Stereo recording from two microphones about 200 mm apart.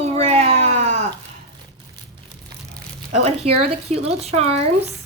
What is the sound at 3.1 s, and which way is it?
Child singing, 35° right (ahead or behind).